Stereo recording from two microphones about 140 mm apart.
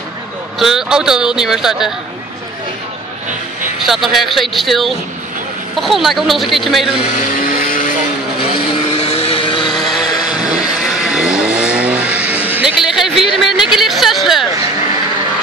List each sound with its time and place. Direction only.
0.6 s speech: 5° right (ahead or behind)
3.8 s speech: centre (ahead or behind)
7.2 s vehicle: 80° left
8.9 s vehicle: 45° left (ahead or behind)
9.8 s vehicle: centre (ahead or behind)
12.8 s speech: 5° right (ahead or behind)